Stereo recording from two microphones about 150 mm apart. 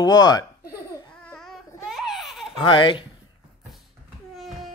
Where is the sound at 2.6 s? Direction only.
35° left (ahead or behind).